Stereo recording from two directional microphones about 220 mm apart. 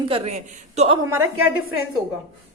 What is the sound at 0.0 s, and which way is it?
Speech, 25° right (ahead or behind).